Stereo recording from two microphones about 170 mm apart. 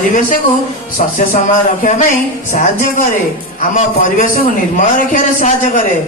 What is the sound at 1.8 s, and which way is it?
A man's voice, 50° left (ahead or behind).